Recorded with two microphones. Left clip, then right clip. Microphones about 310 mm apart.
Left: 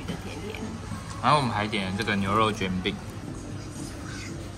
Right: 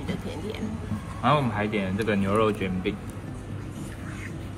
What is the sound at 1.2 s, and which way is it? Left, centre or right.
Speech, centre.